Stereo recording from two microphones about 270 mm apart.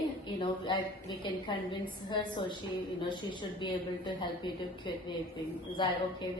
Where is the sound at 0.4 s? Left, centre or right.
Centre.